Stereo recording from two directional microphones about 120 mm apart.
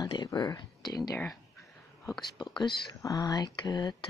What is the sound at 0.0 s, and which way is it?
Speech, 35° left (ahead or behind).